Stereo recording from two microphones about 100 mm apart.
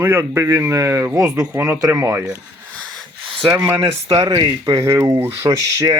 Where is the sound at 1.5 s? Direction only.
20° right (ahead or behind).